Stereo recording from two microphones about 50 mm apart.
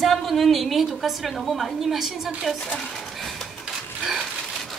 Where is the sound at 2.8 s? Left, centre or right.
Centre.